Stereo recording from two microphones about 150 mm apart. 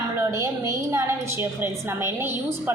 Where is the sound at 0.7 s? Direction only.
20° right (ahead or behind).